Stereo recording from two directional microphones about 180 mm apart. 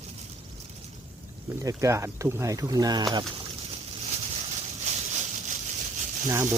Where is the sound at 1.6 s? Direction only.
15° right (ahead or behind).